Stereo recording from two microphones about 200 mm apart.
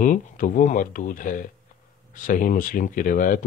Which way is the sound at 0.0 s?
40° left (ahead or behind).